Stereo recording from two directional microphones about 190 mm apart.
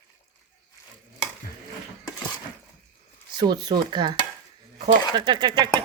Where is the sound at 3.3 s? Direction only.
20° right (ahead or behind).